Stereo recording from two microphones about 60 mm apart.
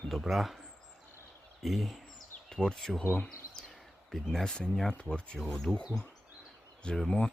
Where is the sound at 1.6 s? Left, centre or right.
Centre.